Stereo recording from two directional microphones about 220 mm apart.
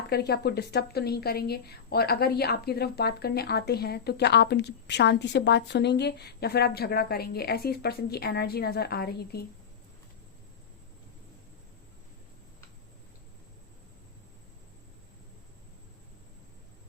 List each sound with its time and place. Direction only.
0.1 s a woman's voice: 45° left (ahead or behind)